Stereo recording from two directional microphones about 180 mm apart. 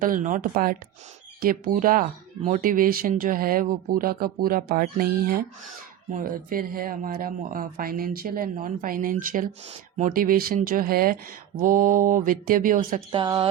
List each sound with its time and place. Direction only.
0.0 s speech: 45° right (ahead or behind)
13.1 s speech: 25° right (ahead or behind)